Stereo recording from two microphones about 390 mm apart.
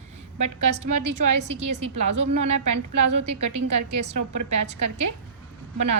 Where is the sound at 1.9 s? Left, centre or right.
Right.